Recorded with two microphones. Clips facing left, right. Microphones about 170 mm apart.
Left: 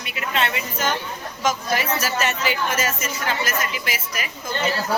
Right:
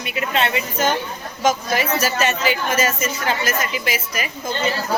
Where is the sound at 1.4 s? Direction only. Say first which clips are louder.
Right 3 dB; 20° right (ahead or behind).